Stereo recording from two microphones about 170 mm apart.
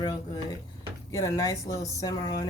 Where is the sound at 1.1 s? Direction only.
20° left (ahead or behind).